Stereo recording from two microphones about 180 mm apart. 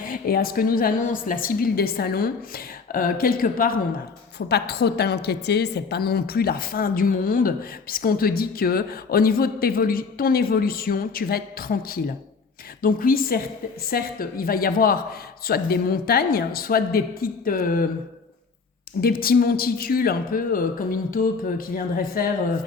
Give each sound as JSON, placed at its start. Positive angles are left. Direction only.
{"t": 0.0, "sound": "a woman's voice", "side_deg": 55}
{"t": 4.4, "sound": "a woman's voice", "side_deg": 65}
{"t": 19.0, "sound": "a woman's voice", "side_deg": 55}